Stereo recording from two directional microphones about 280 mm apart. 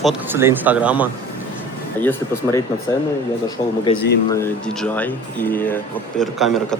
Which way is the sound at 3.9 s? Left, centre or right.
Centre.